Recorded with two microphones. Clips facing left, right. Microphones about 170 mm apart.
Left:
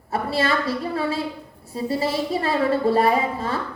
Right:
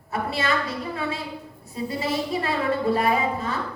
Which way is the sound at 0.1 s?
30° left (ahead or behind).